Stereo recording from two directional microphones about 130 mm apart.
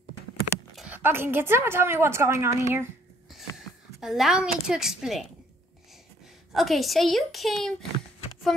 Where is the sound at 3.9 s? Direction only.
Centre (ahead or behind).